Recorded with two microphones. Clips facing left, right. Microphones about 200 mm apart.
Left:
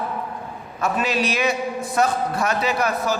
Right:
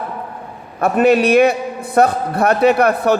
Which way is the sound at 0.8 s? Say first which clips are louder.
Right 10 dB; 60° right (ahead or behind).